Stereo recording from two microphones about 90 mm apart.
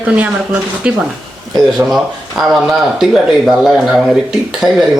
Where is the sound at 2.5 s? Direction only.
5° right (ahead or behind).